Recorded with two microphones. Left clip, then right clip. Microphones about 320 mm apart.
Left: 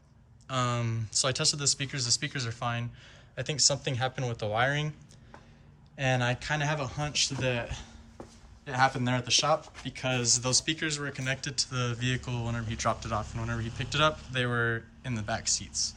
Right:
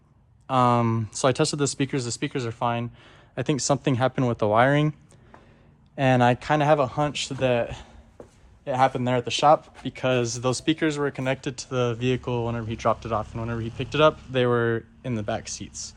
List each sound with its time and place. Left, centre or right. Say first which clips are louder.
0.4 s speech: right 11 dB; centre
6.0 s speech: right 9 dB; centre